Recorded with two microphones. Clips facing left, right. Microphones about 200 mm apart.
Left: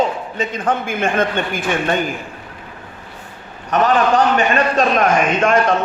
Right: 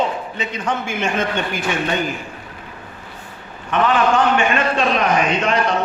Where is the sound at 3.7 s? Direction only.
40° left (ahead or behind).